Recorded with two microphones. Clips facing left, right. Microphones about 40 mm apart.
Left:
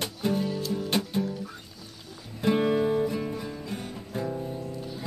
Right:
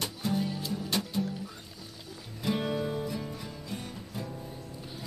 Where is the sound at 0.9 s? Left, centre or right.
Left.